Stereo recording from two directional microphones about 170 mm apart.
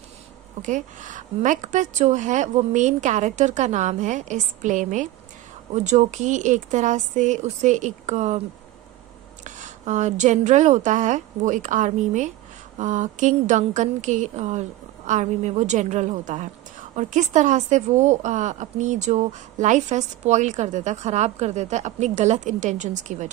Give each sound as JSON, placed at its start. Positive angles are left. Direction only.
{"t": 0.6, "sound": "a woman's voice", "side_deg": -45}
{"t": 9.4, "sound": "a woman's voice", "side_deg": -45}